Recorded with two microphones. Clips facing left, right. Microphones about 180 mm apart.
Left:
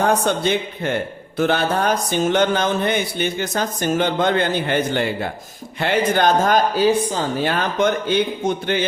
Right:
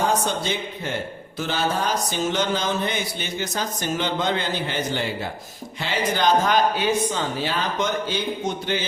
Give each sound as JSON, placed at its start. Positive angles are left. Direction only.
{"t": 0.0, "sound": "mantra", "side_deg": 60}
{"t": 5.8, "sound": "a man's voice", "side_deg": 55}
{"t": 7.4, "sound": "mantra", "side_deg": 55}
{"t": 8.4, "sound": "a man's voice", "side_deg": 55}